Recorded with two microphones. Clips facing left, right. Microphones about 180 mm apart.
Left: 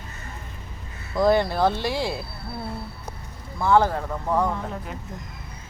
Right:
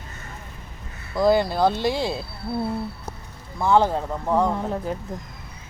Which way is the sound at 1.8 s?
20° right (ahead or behind).